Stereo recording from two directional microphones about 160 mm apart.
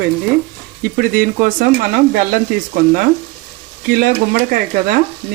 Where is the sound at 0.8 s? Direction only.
65° right (ahead or behind).